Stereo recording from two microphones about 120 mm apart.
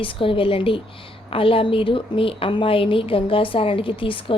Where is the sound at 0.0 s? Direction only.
45° left (ahead or behind).